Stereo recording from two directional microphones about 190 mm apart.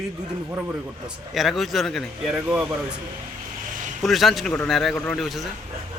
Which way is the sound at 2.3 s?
10° right (ahead or behind).